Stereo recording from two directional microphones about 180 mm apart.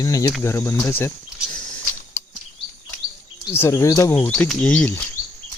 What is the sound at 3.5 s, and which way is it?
Speech, 15° left (ahead or behind).